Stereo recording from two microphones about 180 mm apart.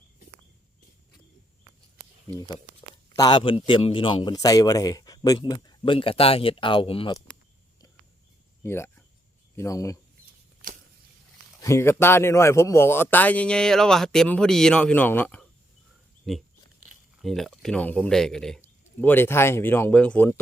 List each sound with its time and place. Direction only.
3.2 s a man's voice: 25° left (ahead or behind)
8.6 s speech: 15° left (ahead or behind)
11.6 s speech: 15° left (ahead or behind)